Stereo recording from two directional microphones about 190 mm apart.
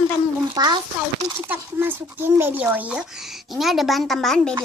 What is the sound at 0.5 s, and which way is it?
A child's voice, 20° right (ahead or behind).